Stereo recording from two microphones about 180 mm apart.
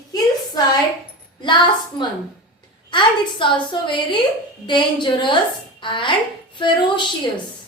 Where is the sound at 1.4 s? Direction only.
25° left (ahead or behind).